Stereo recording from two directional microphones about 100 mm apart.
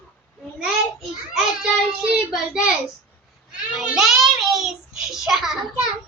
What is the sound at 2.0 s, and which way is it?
Speech, 5° right (ahead or behind).